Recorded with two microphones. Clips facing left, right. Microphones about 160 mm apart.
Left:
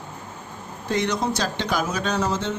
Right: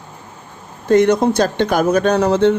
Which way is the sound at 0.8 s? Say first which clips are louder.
Right 11 dB; 50° right (ahead or behind).